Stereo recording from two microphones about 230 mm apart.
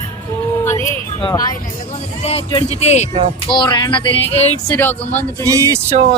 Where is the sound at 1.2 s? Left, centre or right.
Centre.